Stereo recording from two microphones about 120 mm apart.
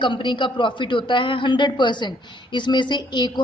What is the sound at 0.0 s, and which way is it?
A man's voice, 40° left (ahead or behind).